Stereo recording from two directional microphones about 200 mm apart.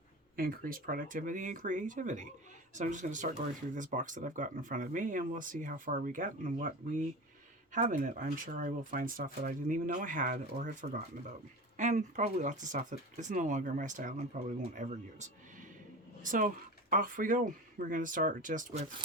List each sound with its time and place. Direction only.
0.3 s speech: 45° right (ahead or behind)